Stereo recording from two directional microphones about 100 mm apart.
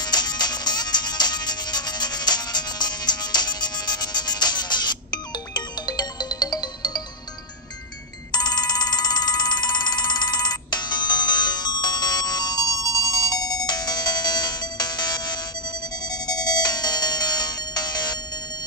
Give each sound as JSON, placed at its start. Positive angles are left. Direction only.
{"t": 0.0, "sound": "music", "side_deg": 45}
{"t": 8.3, "sound": "music", "side_deg": 45}
{"t": 16.1, "sound": "ringtone", "side_deg": 40}